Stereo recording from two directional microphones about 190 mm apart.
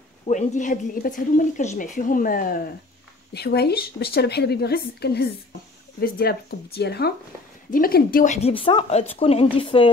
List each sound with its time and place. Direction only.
0.3 s a woman's voice: 40° left (ahead or behind)
3.3 s speech: 60° left (ahead or behind); by 9.8 s 25° left (ahead or behind)